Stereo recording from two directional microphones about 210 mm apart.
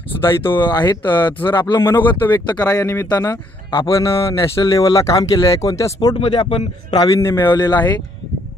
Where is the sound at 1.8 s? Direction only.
10° left (ahead or behind).